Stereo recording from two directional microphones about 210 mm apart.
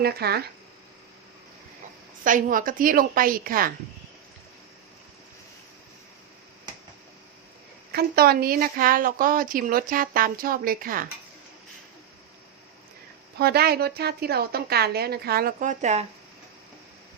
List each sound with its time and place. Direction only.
0.0 s a woman's voice: 50° right (ahead or behind)
2.2 s a woman's voice: 40° right (ahead or behind)
7.9 s a woman's voice: 45° right (ahead or behind)
13.4 s a woman's voice: 50° right (ahead or behind)